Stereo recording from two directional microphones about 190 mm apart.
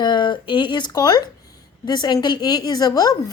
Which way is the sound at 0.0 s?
25° left (ahead or behind).